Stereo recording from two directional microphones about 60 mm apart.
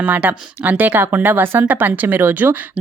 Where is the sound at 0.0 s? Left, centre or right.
Right.